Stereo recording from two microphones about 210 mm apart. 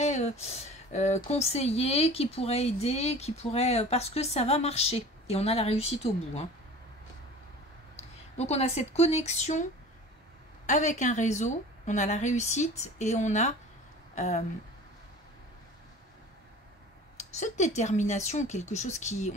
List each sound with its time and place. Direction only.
0.0 s speech: 30° left (ahead or behind)
8.4 s a woman's voice: 30° left (ahead or behind)
10.7 s a woman's voice: 35° left (ahead or behind)
17.2 s a woman's voice: 35° left (ahead or behind)